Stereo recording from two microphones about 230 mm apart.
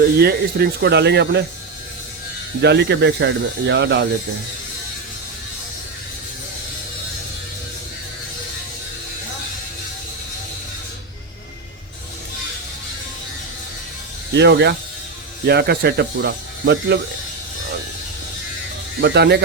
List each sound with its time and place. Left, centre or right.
0.2 s speech: right
2.6 s speech: right
14.3 s speech: right
19.0 s speech: right